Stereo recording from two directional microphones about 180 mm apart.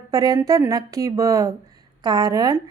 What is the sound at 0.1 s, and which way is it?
A woman's voice, 20° right (ahead or behind).